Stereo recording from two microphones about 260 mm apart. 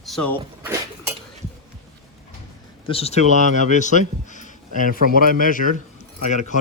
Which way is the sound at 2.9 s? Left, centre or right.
Left.